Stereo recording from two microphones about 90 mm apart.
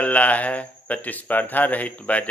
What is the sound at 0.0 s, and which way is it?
A man's voice, 15° left (ahead or behind).